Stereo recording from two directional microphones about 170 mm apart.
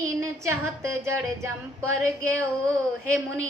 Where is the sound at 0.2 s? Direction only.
15° right (ahead or behind).